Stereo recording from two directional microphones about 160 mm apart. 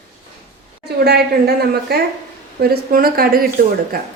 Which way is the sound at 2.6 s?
70° right (ahead or behind).